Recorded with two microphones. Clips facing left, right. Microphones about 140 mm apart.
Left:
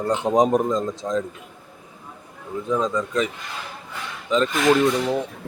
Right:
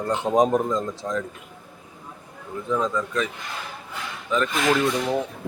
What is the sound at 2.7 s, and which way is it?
Speech, 15° left (ahead or behind).